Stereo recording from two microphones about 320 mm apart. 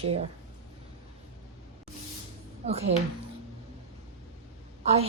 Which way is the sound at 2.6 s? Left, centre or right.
Right.